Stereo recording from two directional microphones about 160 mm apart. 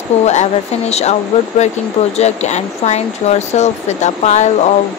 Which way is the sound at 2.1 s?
45° left (ahead or behind).